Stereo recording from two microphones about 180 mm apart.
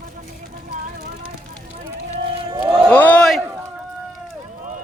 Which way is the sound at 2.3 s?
30° right (ahead or behind).